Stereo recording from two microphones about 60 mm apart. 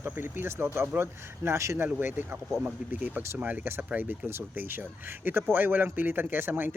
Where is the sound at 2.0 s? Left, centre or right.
Right.